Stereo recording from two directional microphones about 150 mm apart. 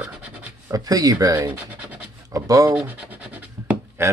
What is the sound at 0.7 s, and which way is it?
Speech, 25° right (ahead or behind).